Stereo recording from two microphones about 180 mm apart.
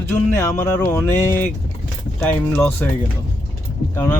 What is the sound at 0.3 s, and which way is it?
Speech, 15° left (ahead or behind).